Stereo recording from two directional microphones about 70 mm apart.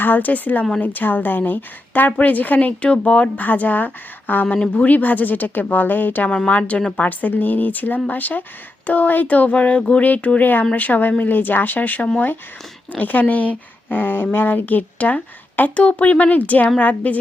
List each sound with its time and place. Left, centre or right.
0.0 s a woman's voice: left
6.3 s a woman's voice: centre